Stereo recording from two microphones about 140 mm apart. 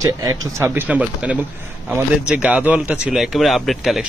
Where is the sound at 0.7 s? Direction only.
10° right (ahead or behind).